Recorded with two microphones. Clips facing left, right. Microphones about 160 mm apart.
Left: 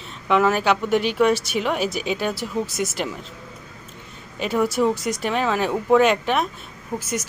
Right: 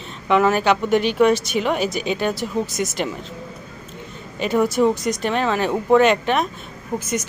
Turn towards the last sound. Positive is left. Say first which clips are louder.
# right 3 dB
turn(degrees=-20)  # may be behind; listen again after turning